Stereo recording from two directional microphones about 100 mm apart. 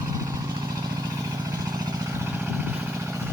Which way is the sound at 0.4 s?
45° right (ahead or behind).